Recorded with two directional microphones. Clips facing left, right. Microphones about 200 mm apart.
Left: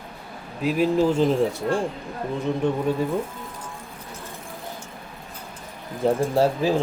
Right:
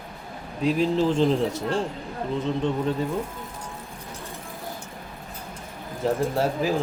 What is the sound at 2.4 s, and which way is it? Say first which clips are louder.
Speech: left 3 dB; 10° left (ahead or behind).